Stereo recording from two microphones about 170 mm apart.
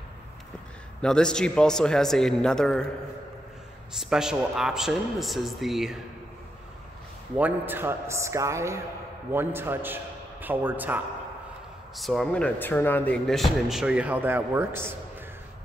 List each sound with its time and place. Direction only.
1.0 s speech: 5° left (ahead or behind)
4.0 s speech: 5° right (ahead or behind)
7.3 s a man's voice: 10° right (ahead or behind)
12.0 s speech: centre (ahead or behind); by 15.0 s 15° right (ahead or behind)